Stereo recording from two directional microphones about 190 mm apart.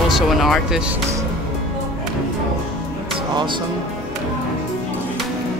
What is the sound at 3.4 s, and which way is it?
Music, 25° right (ahead or behind).